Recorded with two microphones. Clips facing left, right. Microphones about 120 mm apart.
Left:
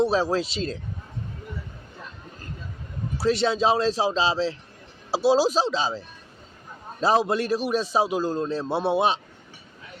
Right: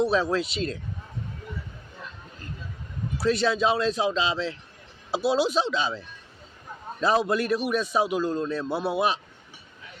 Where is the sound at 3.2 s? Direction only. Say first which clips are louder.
Left 1 dB; 25° left (ahead or behind).